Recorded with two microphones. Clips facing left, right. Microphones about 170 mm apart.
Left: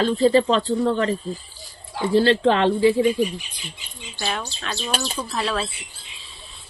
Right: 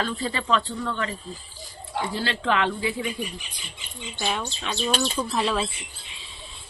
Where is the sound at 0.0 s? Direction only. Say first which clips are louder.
Left 12 dB; 30° left (ahead or behind).